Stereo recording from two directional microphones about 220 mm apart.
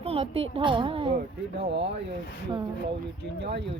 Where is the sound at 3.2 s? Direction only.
50° right (ahead or behind).